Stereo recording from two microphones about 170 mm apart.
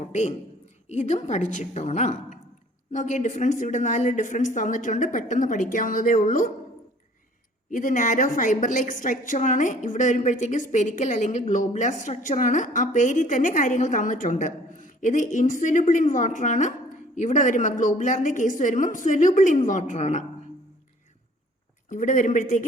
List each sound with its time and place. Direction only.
0.0 s a woman's voice: 45° left (ahead or behind)
7.7 s a woman's voice: 50° left (ahead or behind)
21.8 s a woman's voice: 50° left (ahead or behind)